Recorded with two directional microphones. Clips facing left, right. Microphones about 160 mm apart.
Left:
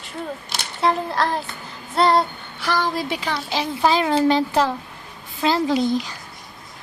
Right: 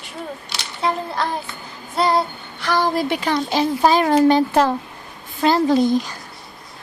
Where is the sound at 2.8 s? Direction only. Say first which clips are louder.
Right 4 dB; 55° right (ahead or behind).